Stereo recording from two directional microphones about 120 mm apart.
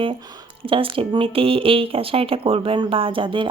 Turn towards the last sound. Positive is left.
turn(degrees=-45)  # may be behind; listen again after turning